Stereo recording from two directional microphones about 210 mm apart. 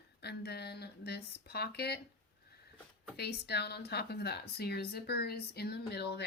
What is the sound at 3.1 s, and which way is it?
Speech, 50° left (ahead or behind).